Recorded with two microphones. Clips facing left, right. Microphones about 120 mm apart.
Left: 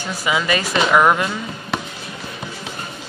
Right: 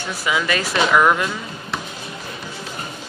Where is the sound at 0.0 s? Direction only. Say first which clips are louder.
Left 1 dB; centre (ahead or behind).